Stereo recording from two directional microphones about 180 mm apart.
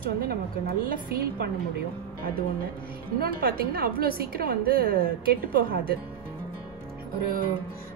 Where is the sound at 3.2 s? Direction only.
55° right (ahead or behind).